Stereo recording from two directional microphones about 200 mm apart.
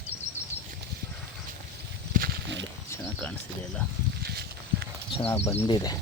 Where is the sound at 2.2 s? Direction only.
60° right (ahead or behind).